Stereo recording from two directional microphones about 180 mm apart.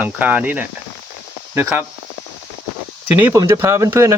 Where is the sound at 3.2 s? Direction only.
15° right (ahead or behind).